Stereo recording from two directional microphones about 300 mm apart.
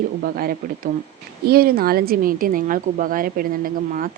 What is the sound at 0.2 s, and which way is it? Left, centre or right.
Speech, right.